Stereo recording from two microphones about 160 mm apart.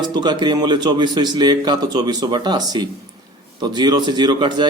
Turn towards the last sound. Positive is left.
turn(degrees=-30)  # may be behind; listen again after turning